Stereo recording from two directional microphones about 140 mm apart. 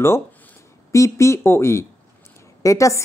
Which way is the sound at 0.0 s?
15° left (ahead or behind).